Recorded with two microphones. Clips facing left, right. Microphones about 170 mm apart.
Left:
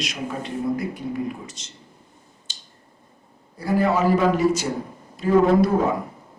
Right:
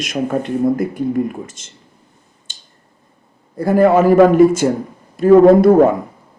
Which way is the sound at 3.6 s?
50° right (ahead or behind).